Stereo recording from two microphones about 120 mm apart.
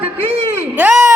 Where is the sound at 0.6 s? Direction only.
10° right (ahead or behind).